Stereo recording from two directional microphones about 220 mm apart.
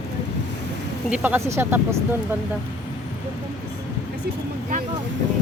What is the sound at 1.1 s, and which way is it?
Speech, 5° right (ahead or behind).